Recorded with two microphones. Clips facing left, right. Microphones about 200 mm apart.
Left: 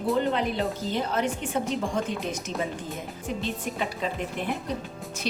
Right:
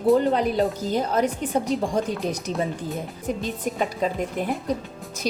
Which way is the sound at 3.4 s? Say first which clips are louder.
Right 3 dB; 40° right (ahead or behind).